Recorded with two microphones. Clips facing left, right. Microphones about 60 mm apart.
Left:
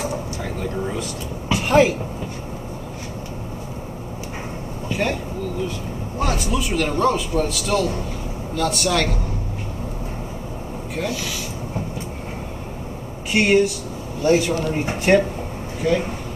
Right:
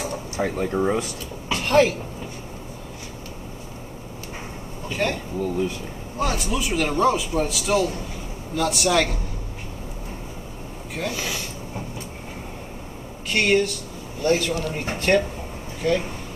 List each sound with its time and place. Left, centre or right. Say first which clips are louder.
0.4 s speech: right 9 dB; right
1.5 s a sound: left 2 dB; centre
4.8 s vehicle: left 2 dB; centre
6.1 s a man's voice: left 2 dB; centre
13.3 s speech: left 3 dB; centre